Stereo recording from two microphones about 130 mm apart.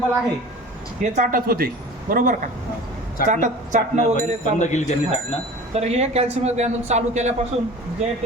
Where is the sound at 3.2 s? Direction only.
75° right (ahead or behind).